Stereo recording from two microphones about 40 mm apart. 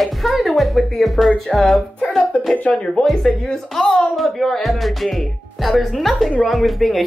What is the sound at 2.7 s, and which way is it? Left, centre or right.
Speech, left.